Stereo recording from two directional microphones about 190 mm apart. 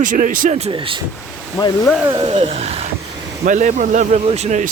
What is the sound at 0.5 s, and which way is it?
Speech, 30° right (ahead or behind).